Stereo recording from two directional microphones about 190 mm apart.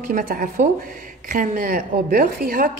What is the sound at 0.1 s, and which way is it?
A woman's voice, 45° right (ahead or behind).